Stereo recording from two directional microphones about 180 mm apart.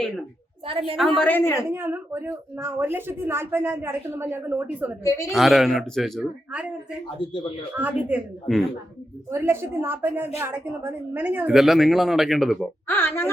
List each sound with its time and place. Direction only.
0.6 s a woman's voice: 30° right (ahead or behind)
0.9 s a woman's voice: centre (ahead or behind)
1.7 s a woman's voice: 15° right (ahead or behind)
5.0 s a woman's voice: 15° left (ahead or behind)
5.3 s a woman's voice: centre (ahead or behind)
7.2 s speech: 25° left (ahead or behind)
7.8 s a woman's voice: 10° right (ahead or behind); by 13.3 s 15° left (ahead or behind)